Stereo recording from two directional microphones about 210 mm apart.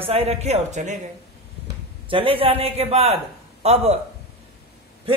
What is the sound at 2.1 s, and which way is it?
A man's voice, 25° right (ahead or behind).